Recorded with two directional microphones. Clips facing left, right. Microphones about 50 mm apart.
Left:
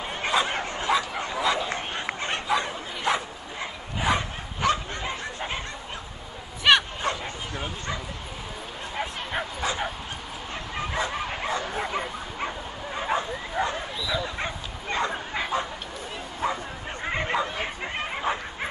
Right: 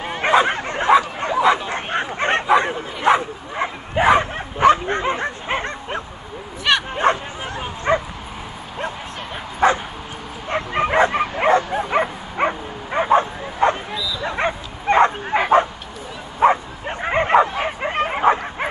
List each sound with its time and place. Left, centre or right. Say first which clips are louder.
0.0 s bow-wow: right 9 dB; right
1.2 s a sound: right 9 dB; right
2.4 s bow-wow: right 7 dB; right
4.8 s dog: right 11 dB; right
6.7 s bow-wow: even; centre
7.0 s bow-wow: right 10 dB; right
9.6 s bow-wow: right 11 dB; right